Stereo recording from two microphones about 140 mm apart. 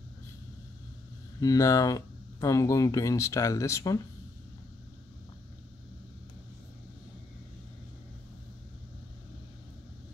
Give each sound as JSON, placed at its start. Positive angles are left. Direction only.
{"t": 1.4, "sound": "speech", "side_deg": 25}